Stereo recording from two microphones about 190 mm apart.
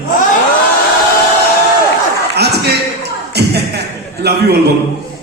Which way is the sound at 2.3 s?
60° right (ahead or behind).